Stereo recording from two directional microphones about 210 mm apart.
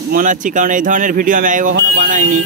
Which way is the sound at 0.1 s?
40° right (ahead or behind).